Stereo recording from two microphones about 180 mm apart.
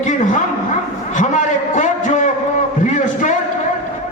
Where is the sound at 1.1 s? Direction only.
45° left (ahead or behind).